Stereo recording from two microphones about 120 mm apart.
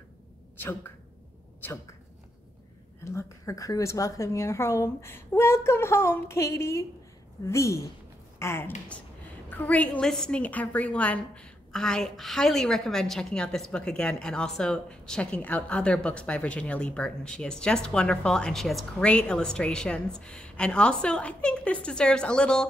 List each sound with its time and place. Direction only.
0.6 s a woman's voice: 15° left (ahead or behind)
3.0 s a woman's voice: 25° left (ahead or behind); by 22.7 s 5° left (ahead or behind)